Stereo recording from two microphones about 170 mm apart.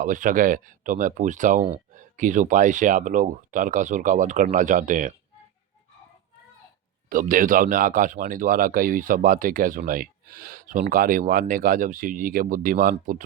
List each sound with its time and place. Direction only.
0.0 s speech: 50° right (ahead or behind)
7.1 s speech: 55° right (ahead or behind)